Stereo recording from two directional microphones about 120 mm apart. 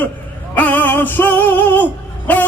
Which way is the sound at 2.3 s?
15° left (ahead or behind).